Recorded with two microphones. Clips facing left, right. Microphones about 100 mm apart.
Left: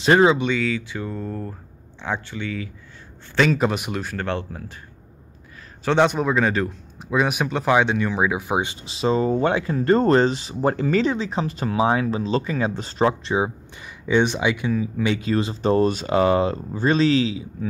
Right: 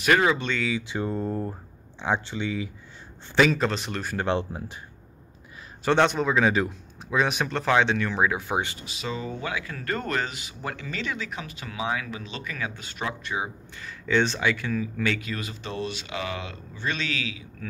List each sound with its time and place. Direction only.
0.0 s speech: 25° left (ahead or behind)
0.7 s speech: 25° right (ahead or behind)
3.5 s speech: 10° left (ahead or behind)
4.2 s speech: 20° right (ahead or behind)
5.9 s speech: 5° left (ahead or behind)
7.0 s speech: 5° left (ahead or behind)
8.8 s speech: 30° left (ahead or behind)
13.8 s speech: 15° left (ahead or behind)
15.1 s speech: 30° left (ahead or behind)